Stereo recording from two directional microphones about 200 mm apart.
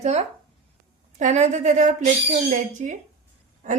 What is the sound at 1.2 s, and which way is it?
Speech, 35° right (ahead or behind).